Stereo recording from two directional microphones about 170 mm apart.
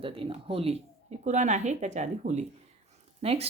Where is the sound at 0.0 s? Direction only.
30° right (ahead or behind).